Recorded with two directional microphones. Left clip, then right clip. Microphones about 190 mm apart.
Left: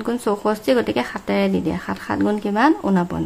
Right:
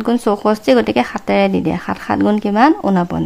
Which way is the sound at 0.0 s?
30° right (ahead or behind).